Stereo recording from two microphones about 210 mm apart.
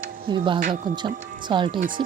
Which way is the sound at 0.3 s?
20° right (ahead or behind).